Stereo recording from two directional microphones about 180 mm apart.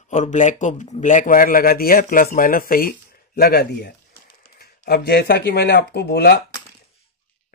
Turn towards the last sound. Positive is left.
turn(degrees=60)  # may be behind; listen again after turning